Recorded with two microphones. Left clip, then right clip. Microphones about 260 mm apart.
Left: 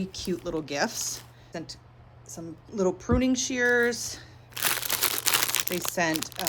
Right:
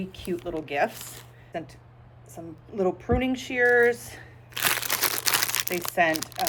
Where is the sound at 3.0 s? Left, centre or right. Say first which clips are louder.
Even; centre.